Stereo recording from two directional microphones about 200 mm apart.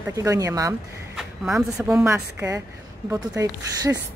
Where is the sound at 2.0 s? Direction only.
15° right (ahead or behind).